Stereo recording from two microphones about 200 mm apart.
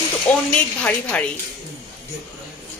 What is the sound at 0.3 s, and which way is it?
Speech, 5° left (ahead or behind).